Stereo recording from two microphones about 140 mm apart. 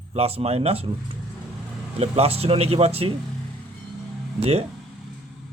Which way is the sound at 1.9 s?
45° right (ahead or behind).